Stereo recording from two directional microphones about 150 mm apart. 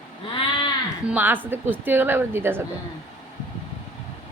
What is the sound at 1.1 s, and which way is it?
A woman's voice, 10° right (ahead or behind).